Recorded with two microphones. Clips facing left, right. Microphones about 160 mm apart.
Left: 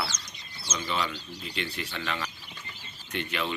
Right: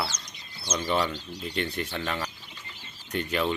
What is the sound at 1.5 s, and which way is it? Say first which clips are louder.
Speech: right 4 dB; 50° right (ahead or behind).